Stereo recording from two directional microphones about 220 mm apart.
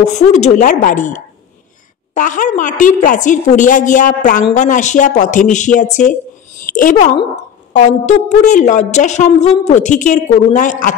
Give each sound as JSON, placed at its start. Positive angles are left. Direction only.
{"t": 0.0, "sound": "a woman's voice", "side_deg": 30}